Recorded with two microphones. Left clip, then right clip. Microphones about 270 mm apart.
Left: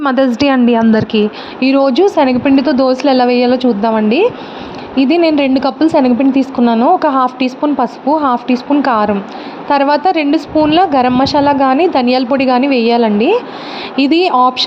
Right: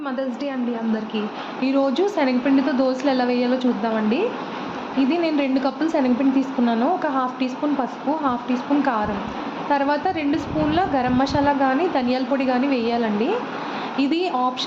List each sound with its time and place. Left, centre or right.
0.3 s a woman's voice: left